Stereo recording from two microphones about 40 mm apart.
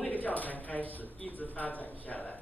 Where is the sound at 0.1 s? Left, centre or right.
Left.